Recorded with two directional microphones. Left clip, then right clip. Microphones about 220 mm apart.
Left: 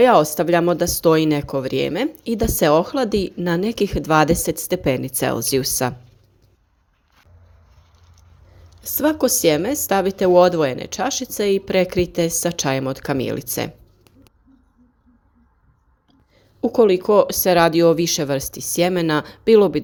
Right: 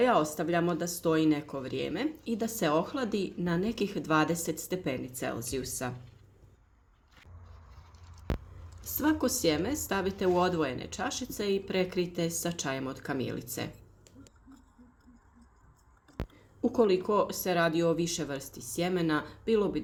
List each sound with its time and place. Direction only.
0.0 s speech: 40° left (ahead or behind)
8.8 s speech: 35° left (ahead or behind)
16.6 s speech: 30° left (ahead or behind)